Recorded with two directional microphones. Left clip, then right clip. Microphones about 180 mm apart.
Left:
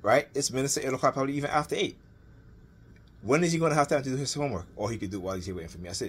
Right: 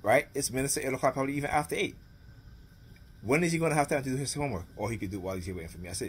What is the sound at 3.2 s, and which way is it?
A man's voice, 15° right (ahead or behind).